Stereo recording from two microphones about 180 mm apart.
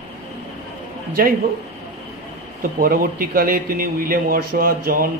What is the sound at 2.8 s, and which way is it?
A man's voice, 50° right (ahead or behind).